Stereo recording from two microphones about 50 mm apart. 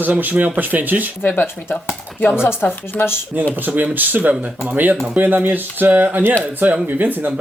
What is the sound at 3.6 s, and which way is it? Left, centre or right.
Speech, right.